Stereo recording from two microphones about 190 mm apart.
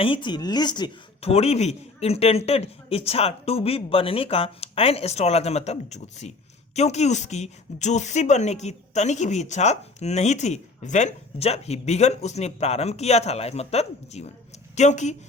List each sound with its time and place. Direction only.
0.0 s a woman's voice: 25° left (ahead or behind)